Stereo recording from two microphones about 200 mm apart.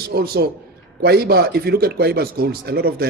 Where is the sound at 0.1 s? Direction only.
50° right (ahead or behind).